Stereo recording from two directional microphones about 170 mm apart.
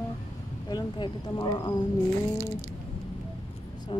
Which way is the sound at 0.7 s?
25° left (ahead or behind).